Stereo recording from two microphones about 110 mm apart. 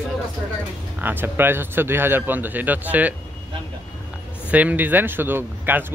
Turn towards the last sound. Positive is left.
turn(degrees=-20)  # may be behind; listen again after turning